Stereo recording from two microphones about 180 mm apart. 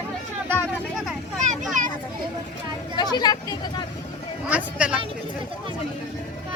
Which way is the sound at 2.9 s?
25° left (ahead or behind).